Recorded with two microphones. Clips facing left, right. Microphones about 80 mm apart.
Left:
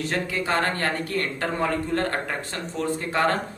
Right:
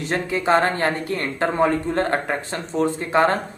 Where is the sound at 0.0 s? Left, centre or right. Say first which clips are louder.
Right 4 dB; right.